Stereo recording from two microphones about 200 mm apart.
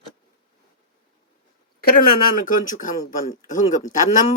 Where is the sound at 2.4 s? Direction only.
40° left (ahead or behind).